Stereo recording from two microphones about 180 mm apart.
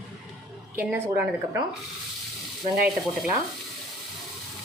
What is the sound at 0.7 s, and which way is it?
Speech, 5° right (ahead or behind).